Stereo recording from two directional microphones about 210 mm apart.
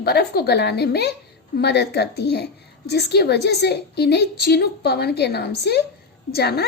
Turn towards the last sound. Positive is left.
turn(degrees=50)  # may be behind; listen again after turning